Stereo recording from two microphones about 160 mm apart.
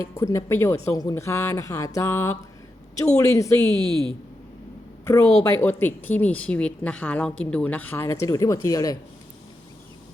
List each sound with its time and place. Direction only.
0.0 s a woman's voice: 20° left (ahead or behind)
3.8 s speech: 30° right (ahead or behind)
5.0 s a woman's voice: 20° left (ahead or behind)